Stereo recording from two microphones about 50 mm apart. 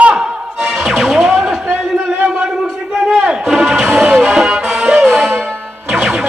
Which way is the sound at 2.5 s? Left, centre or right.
Centre.